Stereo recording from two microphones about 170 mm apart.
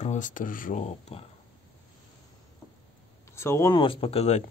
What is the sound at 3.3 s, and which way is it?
Speech, 15° left (ahead or behind).